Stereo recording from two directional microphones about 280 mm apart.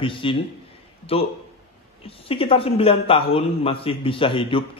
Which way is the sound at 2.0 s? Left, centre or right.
Centre.